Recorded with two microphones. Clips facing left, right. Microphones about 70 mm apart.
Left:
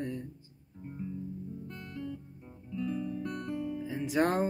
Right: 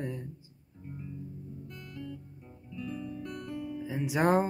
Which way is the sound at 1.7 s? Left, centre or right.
Left.